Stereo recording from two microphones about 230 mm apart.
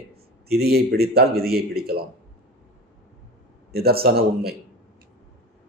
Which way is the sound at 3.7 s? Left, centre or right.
Right.